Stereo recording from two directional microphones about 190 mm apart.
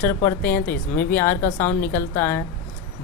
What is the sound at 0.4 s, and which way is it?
Speech, 55° left (ahead or behind).